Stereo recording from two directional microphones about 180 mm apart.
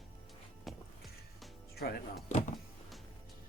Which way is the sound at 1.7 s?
60° left (ahead or behind).